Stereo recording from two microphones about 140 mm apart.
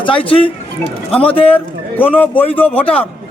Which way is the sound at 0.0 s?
40° left (ahead or behind).